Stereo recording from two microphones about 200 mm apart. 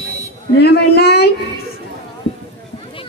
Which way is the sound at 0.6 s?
55° left (ahead or behind).